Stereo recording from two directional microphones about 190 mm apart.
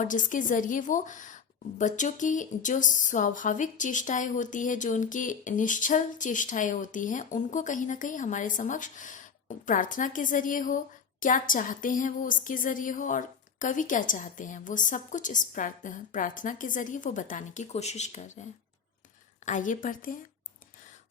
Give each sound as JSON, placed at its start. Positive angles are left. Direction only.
{"t": 0.0, "sound": "a woman's voice", "side_deg": 45}
{"t": 19.5, "sound": "a woman's voice", "side_deg": 40}